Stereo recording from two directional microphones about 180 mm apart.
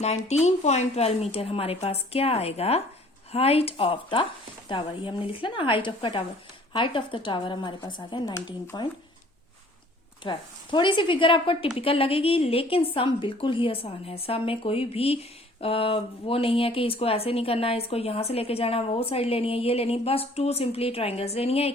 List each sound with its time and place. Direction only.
0.0 s speech: 35° left (ahead or behind)
10.2 s speech: 25° left (ahead or behind)